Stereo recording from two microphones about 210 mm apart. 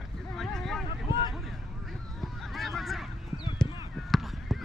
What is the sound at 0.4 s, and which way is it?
Vehicle, centre (ahead or behind).